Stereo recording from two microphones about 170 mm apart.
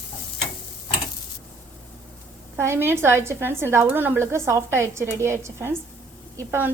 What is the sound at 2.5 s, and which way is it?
A woman's voice, 15° right (ahead or behind).